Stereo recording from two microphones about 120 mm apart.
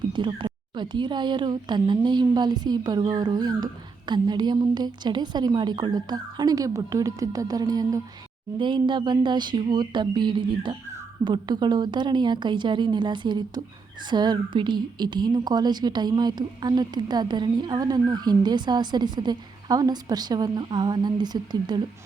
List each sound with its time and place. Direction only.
0.1 s speech: 40° right (ahead or behind)
8.5 s speech: 40° right (ahead or behind)